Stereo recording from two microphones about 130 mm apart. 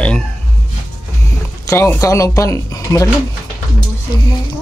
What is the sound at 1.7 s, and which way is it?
Speech, 20° left (ahead or behind).